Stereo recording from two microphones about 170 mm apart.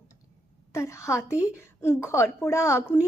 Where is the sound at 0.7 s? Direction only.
15° left (ahead or behind).